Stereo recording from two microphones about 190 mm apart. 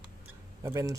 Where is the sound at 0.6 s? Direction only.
15° right (ahead or behind).